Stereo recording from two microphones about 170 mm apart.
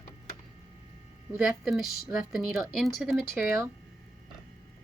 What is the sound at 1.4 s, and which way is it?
Speech, centre (ahead or behind).